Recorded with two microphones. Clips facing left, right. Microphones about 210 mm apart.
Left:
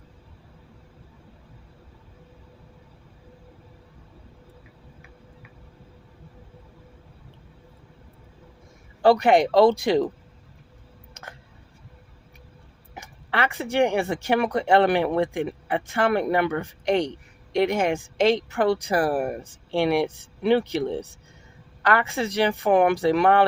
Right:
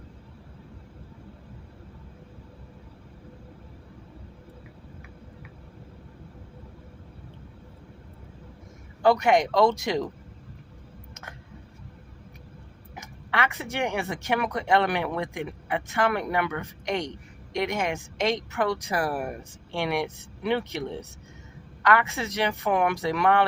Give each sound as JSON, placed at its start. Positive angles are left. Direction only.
{"t": 9.0, "sound": "speech", "side_deg": 30}
{"t": 13.0, "sound": "speech", "side_deg": 35}